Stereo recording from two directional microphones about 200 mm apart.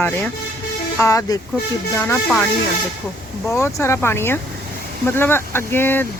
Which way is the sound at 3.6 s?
10° left (ahead or behind).